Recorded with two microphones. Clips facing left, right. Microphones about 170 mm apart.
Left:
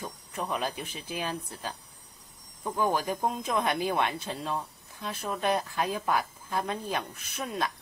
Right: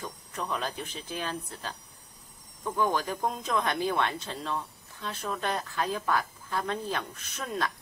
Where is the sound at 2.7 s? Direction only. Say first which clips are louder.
Even; 10° left (ahead or behind).